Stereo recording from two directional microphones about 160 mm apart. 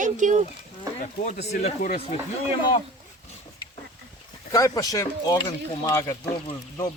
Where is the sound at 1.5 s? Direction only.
50° left (ahead or behind).